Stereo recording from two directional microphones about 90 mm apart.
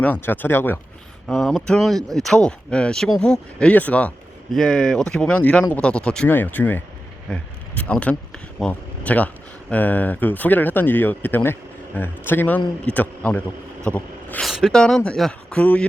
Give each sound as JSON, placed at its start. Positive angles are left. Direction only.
{"t": 0.0, "sound": "speech", "side_deg": 20}
{"t": 1.3, "sound": "speech", "side_deg": 5}
{"t": 4.5, "sound": "speech", "side_deg": 5}
{"t": 6.2, "sound": "speech", "side_deg": 20}
{"t": 13.8, "sound": "zipper", "side_deg": 15}
{"t": 14.4, "sound": "speech", "side_deg": 0}